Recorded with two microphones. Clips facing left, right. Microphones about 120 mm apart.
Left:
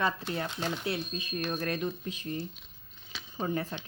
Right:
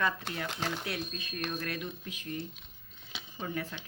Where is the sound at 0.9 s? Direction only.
25° left (ahead or behind).